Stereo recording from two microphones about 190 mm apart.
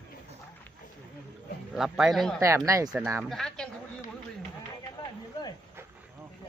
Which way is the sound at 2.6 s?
15° right (ahead or behind).